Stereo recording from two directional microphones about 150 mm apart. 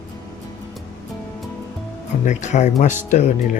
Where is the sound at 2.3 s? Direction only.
55° left (ahead or behind).